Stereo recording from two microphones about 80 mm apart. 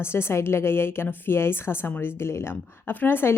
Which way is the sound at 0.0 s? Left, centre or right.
Left.